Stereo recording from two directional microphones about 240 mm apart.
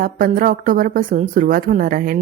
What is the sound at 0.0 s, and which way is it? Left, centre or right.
Speech, right.